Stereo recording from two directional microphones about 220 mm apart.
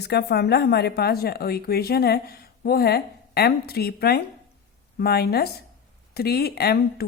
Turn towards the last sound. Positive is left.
turn(degrees=45)  # may be behind; listen again after turning